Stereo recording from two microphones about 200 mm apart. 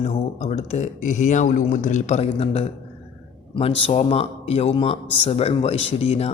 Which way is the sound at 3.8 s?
30° left (ahead or behind).